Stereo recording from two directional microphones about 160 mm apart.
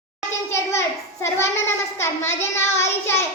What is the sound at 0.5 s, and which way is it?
A child's voice, 15° left (ahead or behind).